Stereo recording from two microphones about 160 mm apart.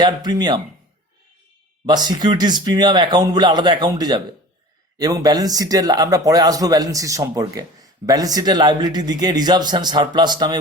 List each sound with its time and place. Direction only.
0.0 s speech: 25° right (ahead or behind)
1.9 s speech: 25° right (ahead or behind)